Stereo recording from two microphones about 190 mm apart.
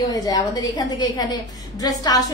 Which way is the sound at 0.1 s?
20° left (ahead or behind).